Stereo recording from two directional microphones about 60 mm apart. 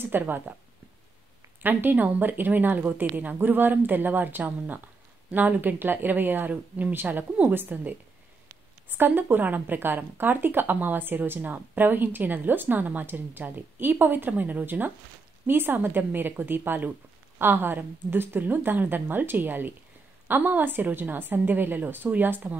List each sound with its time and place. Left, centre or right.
0.0 s a woman's voice: right
1.6 s a woman's voice: right